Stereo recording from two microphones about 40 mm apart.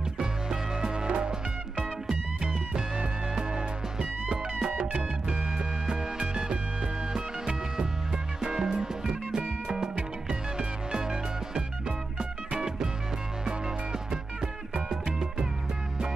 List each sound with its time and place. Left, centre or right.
0.2 s music: centre
2.7 s music: centre
10.6 s music: centre
14.4 s music: centre